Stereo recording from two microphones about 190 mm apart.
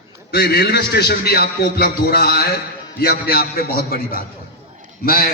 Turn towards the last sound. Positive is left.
turn(degrees=50)  # may be behind; listen again after turning